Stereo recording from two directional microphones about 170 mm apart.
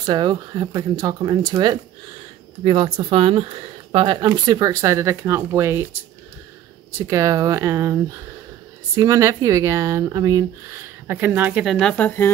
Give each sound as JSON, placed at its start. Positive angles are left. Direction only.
{"t": 0.0, "sound": "speech", "side_deg": -25}
{"t": 7.0, "sound": "speech", "side_deg": -20}